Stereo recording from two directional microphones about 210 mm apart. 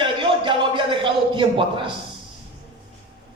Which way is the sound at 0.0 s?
25° right (ahead or behind).